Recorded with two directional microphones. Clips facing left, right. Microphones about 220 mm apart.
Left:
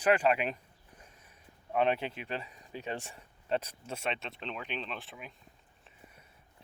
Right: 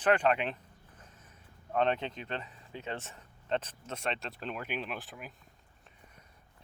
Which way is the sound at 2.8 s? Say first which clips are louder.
Left 1 dB; 15° left (ahead or behind).